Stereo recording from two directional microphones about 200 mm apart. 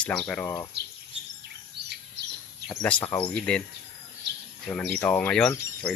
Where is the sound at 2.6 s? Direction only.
5° left (ahead or behind).